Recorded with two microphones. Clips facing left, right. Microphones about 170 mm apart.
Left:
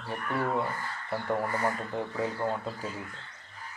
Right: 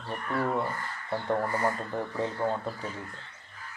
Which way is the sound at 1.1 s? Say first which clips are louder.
Right 2 dB; 20° right (ahead or behind).